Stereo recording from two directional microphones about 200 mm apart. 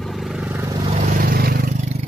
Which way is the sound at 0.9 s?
45° right (ahead or behind).